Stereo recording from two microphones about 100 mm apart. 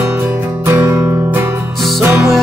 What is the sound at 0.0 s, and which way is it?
Music, 20° right (ahead or behind).